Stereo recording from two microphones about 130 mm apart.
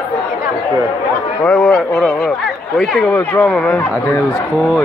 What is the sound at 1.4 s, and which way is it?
Speech, 5° left (ahead or behind).